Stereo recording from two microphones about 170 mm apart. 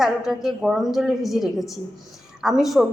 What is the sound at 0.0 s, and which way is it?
A woman's voice, centre (ahead or behind).